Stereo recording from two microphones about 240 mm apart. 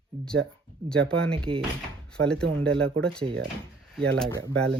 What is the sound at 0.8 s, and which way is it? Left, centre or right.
Speech, centre.